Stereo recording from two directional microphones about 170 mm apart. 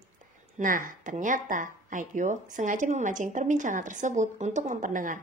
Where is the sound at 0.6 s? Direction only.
50° right (ahead or behind).